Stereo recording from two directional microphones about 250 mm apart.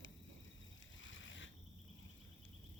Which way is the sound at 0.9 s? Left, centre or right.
Left.